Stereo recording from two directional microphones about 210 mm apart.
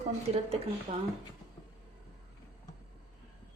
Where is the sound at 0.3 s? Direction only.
30° right (ahead or behind).